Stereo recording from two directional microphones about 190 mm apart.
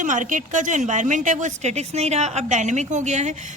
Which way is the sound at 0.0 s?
40° right (ahead or behind).